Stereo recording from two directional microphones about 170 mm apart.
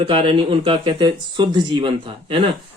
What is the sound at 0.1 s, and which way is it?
Speech, 30° right (ahead or behind).